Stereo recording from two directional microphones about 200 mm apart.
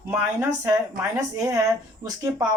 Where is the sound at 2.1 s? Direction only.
15° right (ahead or behind).